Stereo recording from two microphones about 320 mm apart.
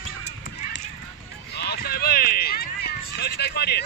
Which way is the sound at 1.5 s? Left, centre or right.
Left.